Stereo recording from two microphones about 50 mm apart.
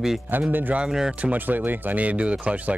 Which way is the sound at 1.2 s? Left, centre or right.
Right.